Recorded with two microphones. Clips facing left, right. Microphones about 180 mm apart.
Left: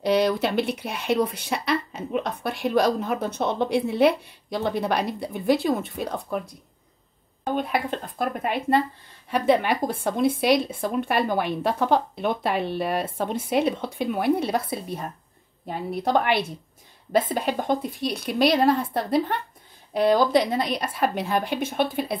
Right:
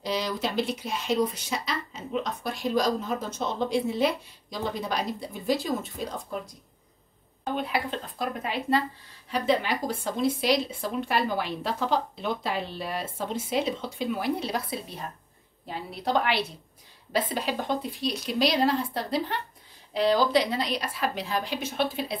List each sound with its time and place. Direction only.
0.0 s speech: 60° left (ahead or behind)
7.4 s a woman's voice: 50° left (ahead or behind)